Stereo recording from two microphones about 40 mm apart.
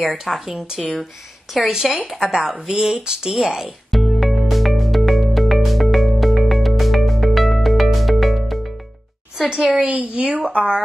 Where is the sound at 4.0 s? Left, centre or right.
Centre.